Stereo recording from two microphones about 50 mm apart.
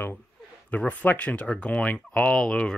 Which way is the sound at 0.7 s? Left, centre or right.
Left.